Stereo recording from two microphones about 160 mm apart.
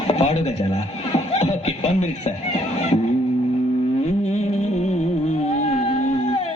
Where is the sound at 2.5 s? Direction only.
40° left (ahead or behind).